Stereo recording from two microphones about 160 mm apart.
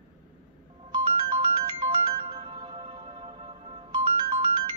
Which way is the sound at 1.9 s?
35° right (ahead or behind).